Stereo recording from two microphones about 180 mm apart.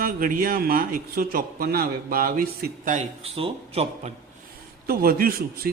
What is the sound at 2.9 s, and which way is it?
A man's voice, 35° right (ahead or behind).